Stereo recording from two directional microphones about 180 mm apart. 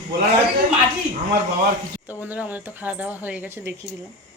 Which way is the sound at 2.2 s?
10° right (ahead or behind).